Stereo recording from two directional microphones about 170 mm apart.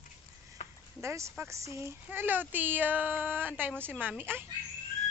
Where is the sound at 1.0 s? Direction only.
15° right (ahead or behind).